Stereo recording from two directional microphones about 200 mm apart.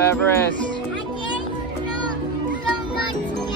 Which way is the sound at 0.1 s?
10° left (ahead or behind).